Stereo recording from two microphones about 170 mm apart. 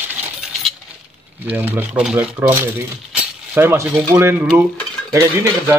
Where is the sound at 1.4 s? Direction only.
10° right (ahead or behind).